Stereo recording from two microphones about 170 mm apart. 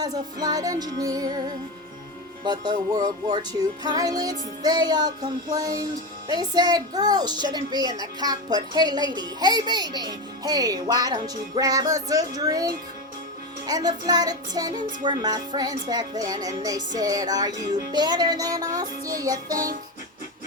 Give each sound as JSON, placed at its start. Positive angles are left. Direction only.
{"t": 0.0, "sound": "music", "side_deg": -25}
{"t": 2.4, "sound": "music", "side_deg": -25}